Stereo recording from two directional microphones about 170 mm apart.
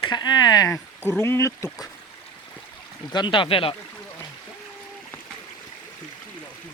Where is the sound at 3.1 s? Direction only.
25° left (ahead or behind).